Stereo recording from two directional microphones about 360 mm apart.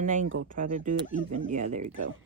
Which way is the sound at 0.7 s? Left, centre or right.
Right.